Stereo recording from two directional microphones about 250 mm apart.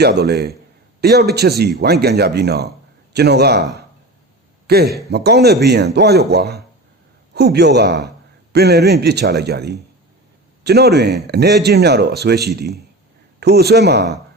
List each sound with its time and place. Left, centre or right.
0.0 s a man's voice: right